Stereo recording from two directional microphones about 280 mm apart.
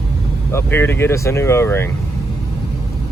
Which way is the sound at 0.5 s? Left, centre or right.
Centre.